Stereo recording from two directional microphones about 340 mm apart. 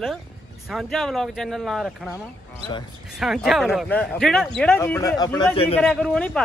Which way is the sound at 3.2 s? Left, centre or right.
Centre.